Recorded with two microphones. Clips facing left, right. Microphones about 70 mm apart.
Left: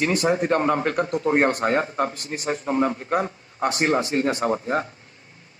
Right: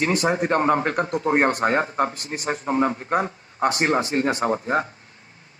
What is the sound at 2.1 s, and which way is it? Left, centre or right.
Speech, right.